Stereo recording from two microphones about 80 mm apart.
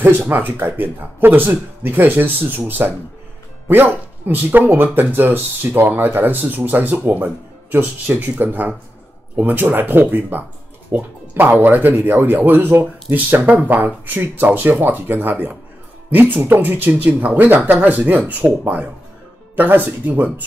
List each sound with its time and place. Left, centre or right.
0.0 s speech: right